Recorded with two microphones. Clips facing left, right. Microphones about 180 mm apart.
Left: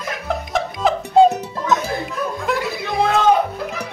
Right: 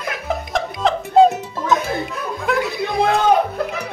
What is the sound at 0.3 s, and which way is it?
Music, centre (ahead or behind).